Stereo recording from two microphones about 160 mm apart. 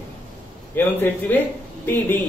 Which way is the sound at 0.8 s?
15° left (ahead or behind).